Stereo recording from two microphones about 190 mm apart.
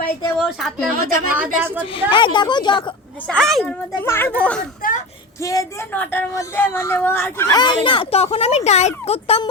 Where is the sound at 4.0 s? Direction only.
10° left (ahead or behind).